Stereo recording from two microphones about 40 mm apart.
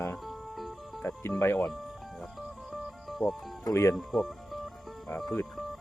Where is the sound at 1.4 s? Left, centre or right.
Left.